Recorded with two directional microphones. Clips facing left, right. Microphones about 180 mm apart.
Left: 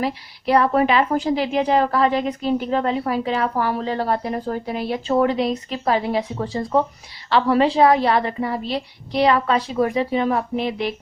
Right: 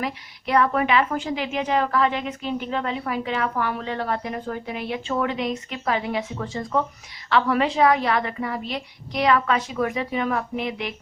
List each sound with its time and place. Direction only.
0.0 s a woman's voice: 35° left (ahead or behind)